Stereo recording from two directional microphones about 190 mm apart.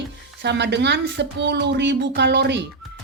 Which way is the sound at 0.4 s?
65° right (ahead or behind).